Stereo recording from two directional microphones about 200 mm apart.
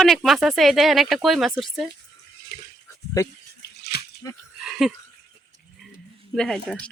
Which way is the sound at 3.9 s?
55° left (ahead or behind).